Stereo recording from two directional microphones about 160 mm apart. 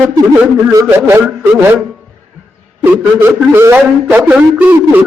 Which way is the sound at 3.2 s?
15° right (ahead or behind).